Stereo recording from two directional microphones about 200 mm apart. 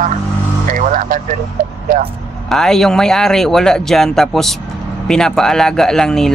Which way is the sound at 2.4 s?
Centre (ahead or behind).